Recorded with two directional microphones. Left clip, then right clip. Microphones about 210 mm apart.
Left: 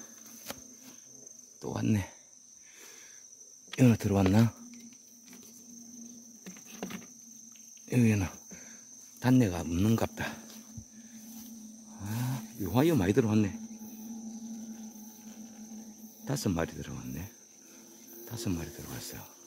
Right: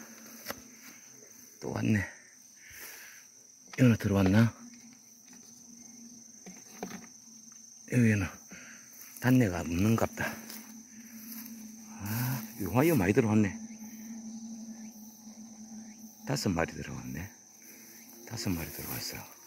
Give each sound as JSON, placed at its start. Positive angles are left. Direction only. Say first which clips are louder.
{"t": 1.6, "sound": "cricket", "louder": "right 1 dB", "side_deg": 10}
{"t": 3.8, "sound": "speech", "louder": "left 1 dB", "side_deg": 15}
{"t": 7.9, "sound": "speech", "louder": "even", "side_deg": 15}
{"t": 8.2, "sound": "a sound", "louder": "even", "side_deg": 20}
{"t": 9.2, "sound": "speech", "louder": "even", "side_deg": 20}
{"t": 9.7, "sound": "speech", "louder": "even", "side_deg": 30}
{"t": 9.9, "sound": "dog", "louder": "right 2 dB", "side_deg": 20}
{"t": 11.9, "sound": "cricket", "louder": "right 2 dB", "side_deg": 15}
{"t": 16.3, "sound": "speech", "louder": "right 1 dB", "side_deg": 15}